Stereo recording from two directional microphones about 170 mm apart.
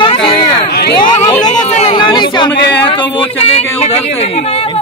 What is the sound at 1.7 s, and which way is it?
Chatter, 40° left (ahead or behind).